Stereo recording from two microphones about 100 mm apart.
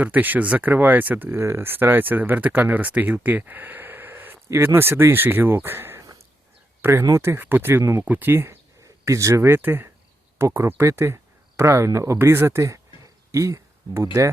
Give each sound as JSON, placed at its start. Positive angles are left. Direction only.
{"t": 0.0, "sound": "speech", "side_deg": -15}